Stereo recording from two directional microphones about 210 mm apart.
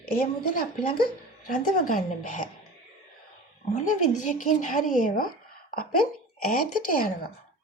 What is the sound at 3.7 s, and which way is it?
A woman's voice, 35° left (ahead or behind).